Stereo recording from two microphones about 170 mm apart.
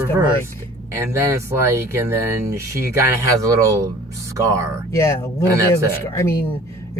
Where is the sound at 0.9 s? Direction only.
15° right (ahead or behind).